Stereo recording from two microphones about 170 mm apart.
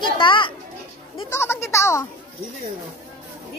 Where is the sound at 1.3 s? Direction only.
15° left (ahead or behind).